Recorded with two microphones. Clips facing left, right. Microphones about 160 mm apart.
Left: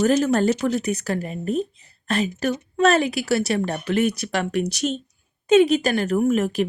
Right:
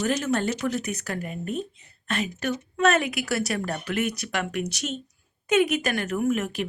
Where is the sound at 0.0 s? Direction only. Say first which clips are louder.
Left 7 dB; 40° left (ahead or behind).